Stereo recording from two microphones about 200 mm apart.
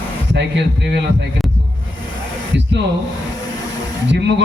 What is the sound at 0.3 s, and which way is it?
Speech, 60° right (ahead or behind).